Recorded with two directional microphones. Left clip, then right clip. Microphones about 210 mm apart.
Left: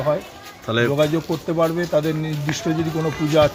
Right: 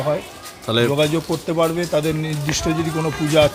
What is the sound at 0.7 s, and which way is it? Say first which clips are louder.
A man's voice: right 1 dB; 10° right (ahead or behind).